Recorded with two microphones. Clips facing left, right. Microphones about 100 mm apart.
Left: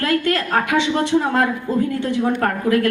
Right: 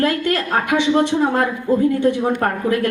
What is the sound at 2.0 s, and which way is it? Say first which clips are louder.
Speech: right 2 dB; 20° right (ahead or behind).